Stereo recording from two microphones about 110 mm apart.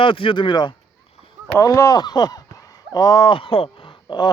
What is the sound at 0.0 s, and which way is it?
Speech, 50° left (ahead or behind).